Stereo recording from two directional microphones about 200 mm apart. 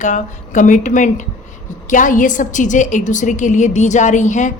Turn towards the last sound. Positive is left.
turn(degrees=40)  # may be behind; listen again after turning